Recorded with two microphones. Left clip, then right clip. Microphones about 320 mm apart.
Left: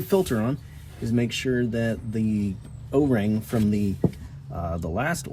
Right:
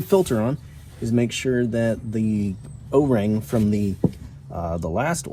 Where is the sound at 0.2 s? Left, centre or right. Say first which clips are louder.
Right 4 dB; centre.